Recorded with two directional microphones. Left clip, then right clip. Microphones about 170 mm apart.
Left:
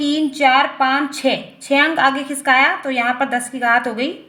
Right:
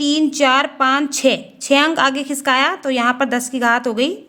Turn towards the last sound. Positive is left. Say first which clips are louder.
# even
turn(degrees=-40)  # may be behind; listen again after turning